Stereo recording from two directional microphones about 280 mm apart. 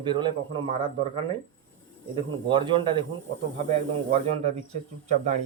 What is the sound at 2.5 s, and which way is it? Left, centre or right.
A man's voice, centre.